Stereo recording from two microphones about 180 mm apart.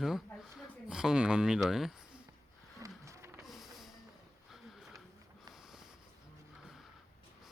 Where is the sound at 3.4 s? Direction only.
Centre (ahead or behind).